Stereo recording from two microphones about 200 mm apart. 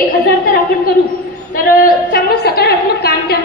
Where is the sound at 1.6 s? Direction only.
50° left (ahead or behind).